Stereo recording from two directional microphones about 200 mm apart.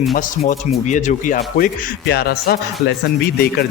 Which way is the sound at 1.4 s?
50° left (ahead or behind).